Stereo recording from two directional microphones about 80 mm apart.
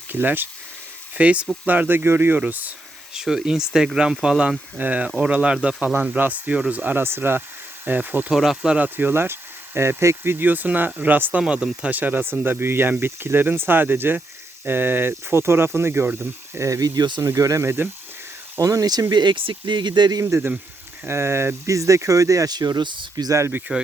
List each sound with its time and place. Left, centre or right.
0.1 s speech: right
3.2 s speech: centre; by 8.3 s right
8.3 s speech: centre
8.7 s speech: right
16.6 s speech: right
18.6 s speech: right
19.1 s speech: right
20.2 s speech: right
22.5 s speech: right
23.3 s speech: right